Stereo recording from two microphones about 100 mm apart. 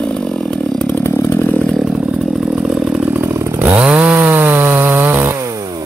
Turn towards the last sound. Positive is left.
turn(degrees=-20)  # may be behind; listen again after turning